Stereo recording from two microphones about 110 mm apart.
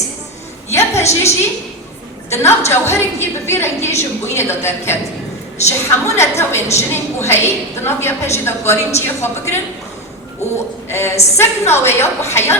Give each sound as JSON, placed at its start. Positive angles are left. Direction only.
{"t": 0.7, "sound": "a sound", "side_deg": 25}
{"t": 2.3, "sound": "a woman's voice", "side_deg": 25}
{"t": 10.8, "sound": "a woman's voice", "side_deg": 25}